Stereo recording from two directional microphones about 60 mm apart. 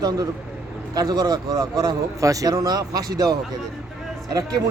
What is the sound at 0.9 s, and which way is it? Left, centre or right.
A man's voice, right.